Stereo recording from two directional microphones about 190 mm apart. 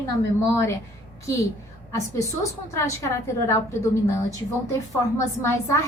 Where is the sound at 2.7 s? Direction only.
15° left (ahead or behind).